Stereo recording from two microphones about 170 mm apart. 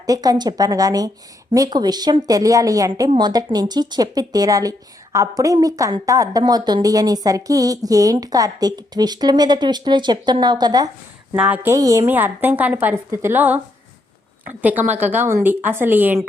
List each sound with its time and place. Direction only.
0.0 s a woman's voice: 20° right (ahead or behind)
11.3 s a woman's voice: 5° right (ahead or behind)